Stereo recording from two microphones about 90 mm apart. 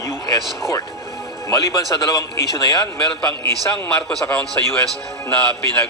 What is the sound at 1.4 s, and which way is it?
A man's voice, 40° left (ahead or behind).